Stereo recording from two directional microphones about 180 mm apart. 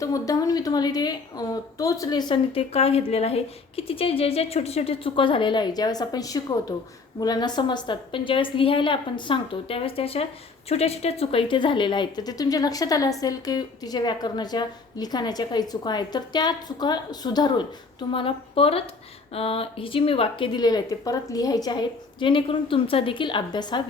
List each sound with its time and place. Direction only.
0.0 s a woman's voice: 20° left (ahead or behind)